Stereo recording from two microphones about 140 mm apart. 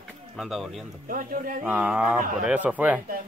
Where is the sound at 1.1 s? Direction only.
80° right.